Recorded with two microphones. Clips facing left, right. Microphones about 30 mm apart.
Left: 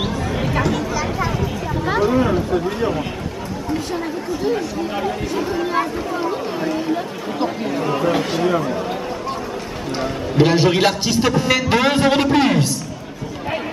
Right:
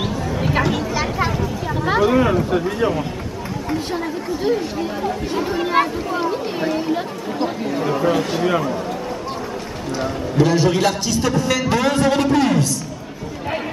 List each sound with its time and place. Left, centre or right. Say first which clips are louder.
0.0 s chatter: left 1 dB; centre
0.5 s chatter: right 2 dB; centre
2.0 s speech: right 1 dB; centre
7.6 s speech: right 1 dB; centre
10.3 s a man's voice: left 2 dB; left